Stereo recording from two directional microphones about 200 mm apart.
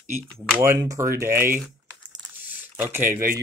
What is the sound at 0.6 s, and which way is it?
Speech, 15° right (ahead or behind).